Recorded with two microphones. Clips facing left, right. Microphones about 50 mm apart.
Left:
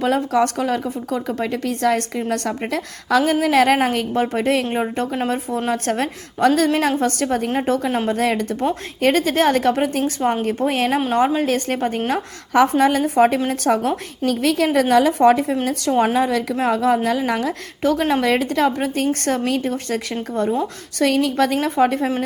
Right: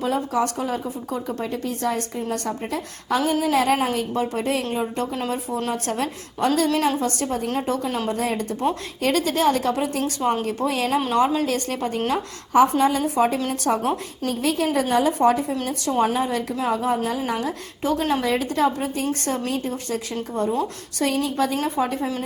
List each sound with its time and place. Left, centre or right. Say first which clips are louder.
0.0 s a woman's voice: left 5 dB; left
7.5 s a woman's voice: left 4 dB; left
7.9 s a woman's voice: left 5 dB; left
9.0 s a woman's voice: left 6 dB; left
11.1 s a woman's voice: left 2 dB; left
14.3 s a woman's voice: left 4 dB; left
15.6 s a woman's voice: left 2 dB; left
16.1 s a woman's voice: left 5 dB; left